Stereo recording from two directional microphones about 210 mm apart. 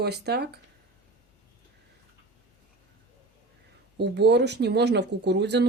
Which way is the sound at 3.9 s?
55° right (ahead or behind).